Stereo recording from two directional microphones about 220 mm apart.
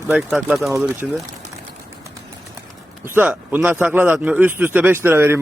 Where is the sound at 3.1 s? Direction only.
10° right (ahead or behind).